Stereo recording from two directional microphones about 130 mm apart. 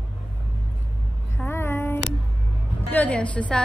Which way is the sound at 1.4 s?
20° left (ahead or behind).